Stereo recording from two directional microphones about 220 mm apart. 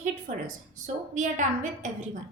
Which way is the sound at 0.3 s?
35° right (ahead or behind).